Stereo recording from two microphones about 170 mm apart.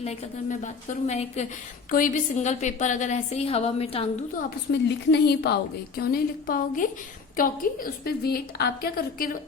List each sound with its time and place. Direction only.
0.0 s a woman's voice: 40° left (ahead or behind)
4.4 s a woman's voice: 80° left
6.0 s a woman's voice: 60° left (ahead or behind)